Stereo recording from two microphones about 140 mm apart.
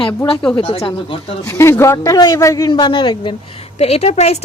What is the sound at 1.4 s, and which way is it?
A man's voice, 20° left (ahead or behind).